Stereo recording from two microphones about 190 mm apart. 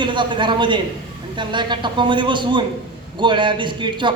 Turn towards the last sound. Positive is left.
turn(degrees=-25)  # may be behind; listen again after turning